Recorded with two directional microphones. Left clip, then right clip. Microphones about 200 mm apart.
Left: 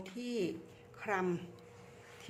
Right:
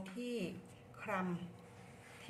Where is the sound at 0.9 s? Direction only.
55° left (ahead or behind).